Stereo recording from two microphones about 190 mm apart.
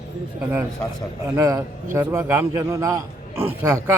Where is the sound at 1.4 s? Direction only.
15° right (ahead or behind).